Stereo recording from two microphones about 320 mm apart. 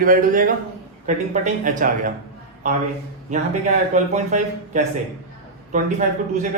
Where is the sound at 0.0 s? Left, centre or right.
Right.